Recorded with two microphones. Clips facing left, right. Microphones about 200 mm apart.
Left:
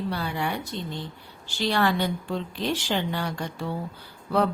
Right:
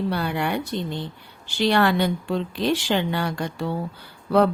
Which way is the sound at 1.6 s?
65° right (ahead or behind).